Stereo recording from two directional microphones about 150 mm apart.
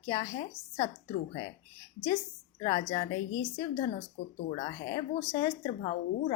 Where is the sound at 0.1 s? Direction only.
35° left (ahead or behind).